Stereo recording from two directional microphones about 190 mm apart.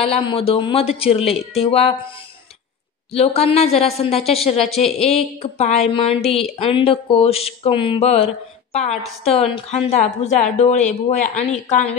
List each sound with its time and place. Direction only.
0.0 s speech: 30° left (ahead or behind)
3.1 s speech: 30° left (ahead or behind)